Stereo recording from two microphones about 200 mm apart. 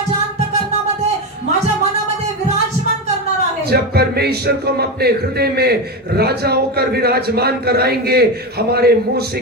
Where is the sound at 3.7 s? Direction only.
50° right (ahead or behind).